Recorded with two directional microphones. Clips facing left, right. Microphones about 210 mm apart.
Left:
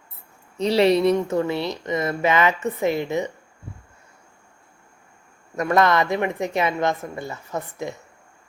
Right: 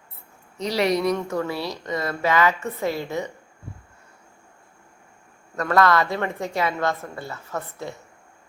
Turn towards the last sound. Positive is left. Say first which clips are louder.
# left 3 dB
turn(degrees=15)  # may be behind; listen again after turning